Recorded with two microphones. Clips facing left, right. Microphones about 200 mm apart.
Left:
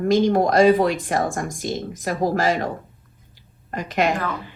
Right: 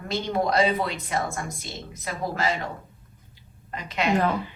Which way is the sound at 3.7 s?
45° left (ahead or behind).